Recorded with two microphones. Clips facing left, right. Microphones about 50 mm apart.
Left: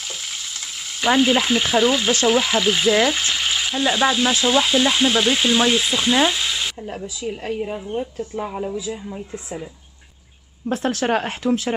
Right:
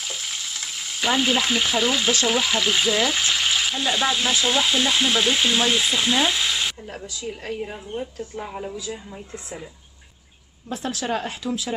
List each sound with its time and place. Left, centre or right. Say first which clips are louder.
0.6 s frying: even; centre
7.2 s speech: left 4 dB; centre
10.7 s speech: left 6 dB; left